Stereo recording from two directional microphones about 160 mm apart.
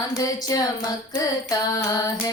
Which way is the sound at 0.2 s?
25° left (ahead or behind).